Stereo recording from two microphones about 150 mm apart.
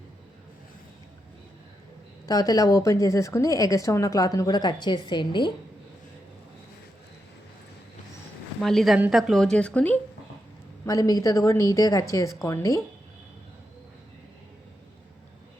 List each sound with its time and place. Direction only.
2.2 s a woman's voice: 25° left (ahead or behind)
8.6 s speech: centre (ahead or behind)
10.8 s a woman's voice: 20° left (ahead or behind)